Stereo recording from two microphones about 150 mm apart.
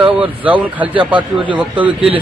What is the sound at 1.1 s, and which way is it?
Speech, 35° right (ahead or behind).